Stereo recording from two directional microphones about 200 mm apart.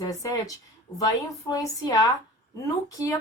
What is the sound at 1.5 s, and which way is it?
Speech, 15° left (ahead or behind).